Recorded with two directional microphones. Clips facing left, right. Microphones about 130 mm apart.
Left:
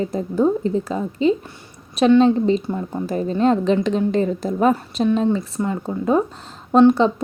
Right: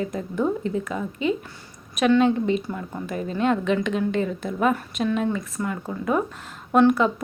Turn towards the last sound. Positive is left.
turn(degrees=25)  # may be behind; listen again after turning